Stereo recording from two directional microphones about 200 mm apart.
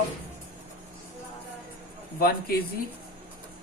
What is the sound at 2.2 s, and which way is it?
Speech, 50° left (ahead or behind).